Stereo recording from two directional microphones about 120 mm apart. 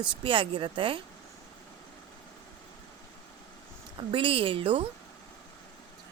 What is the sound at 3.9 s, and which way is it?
Speech, 45° right (ahead or behind).